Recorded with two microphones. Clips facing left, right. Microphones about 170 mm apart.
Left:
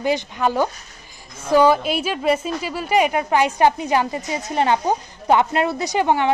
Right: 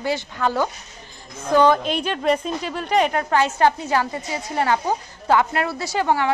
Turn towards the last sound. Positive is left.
turn(degrees=20)  # may be behind; listen again after turning